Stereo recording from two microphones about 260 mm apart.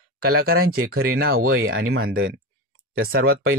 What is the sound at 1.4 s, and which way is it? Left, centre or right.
Speech, right.